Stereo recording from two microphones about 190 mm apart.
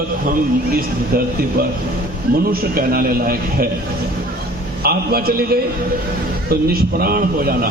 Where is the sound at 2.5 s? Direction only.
50° right (ahead or behind).